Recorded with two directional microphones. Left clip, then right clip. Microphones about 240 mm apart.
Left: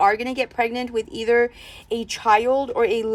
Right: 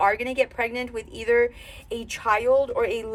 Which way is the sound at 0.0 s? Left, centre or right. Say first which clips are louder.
Left 2 dB; centre.